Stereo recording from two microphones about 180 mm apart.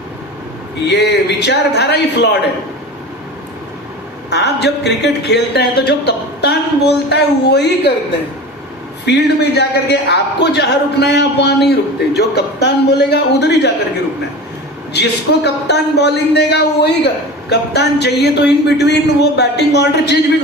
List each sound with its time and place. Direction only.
0.9 s a man's voice: 70° left (ahead or behind)
4.3 s a man's voice: 70° left (ahead or behind)
9.0 s a man's voice: 70° left (ahead or behind)
14.9 s a man's voice: 70° left (ahead or behind)